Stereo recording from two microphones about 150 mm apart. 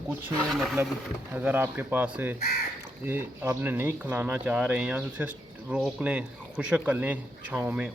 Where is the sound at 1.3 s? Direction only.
10° right (ahead or behind).